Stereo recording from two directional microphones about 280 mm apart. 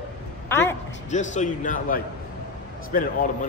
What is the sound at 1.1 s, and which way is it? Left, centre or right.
Speech, left.